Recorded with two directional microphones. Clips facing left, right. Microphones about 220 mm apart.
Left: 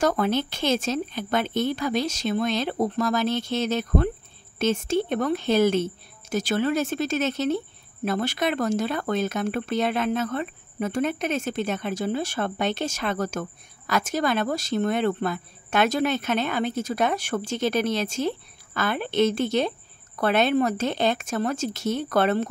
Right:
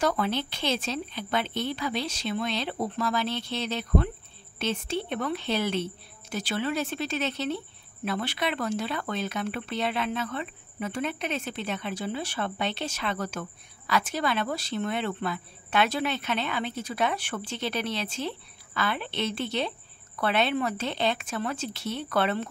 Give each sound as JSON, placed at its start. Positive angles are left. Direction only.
{"t": 0.0, "sound": "speech", "side_deg": 45}